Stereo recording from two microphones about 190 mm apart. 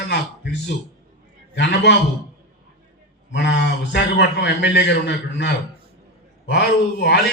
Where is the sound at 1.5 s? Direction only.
65° left (ahead or behind).